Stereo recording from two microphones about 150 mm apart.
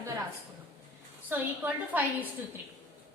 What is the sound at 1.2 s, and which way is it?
A woman's voice, 10° right (ahead or behind).